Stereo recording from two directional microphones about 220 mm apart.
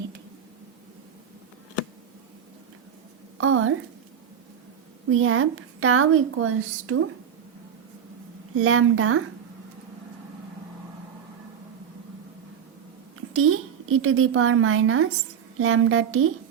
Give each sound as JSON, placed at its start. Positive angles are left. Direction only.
{"t": 3.4, "sound": "a woman's voice", "side_deg": -70}
{"t": 5.1, "sound": "a woman's voice", "side_deg": -70}
{"t": 8.5, "sound": "a woman's voice", "side_deg": -70}
{"t": 13.3, "sound": "a woman's voice", "side_deg": -75}